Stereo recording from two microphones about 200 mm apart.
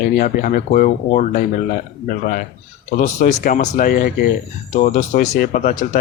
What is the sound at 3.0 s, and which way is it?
Speech, 40° left (ahead or behind).